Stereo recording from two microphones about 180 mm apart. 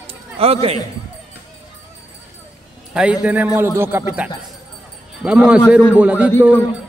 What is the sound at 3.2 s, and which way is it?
A man's voice, 10° right (ahead or behind).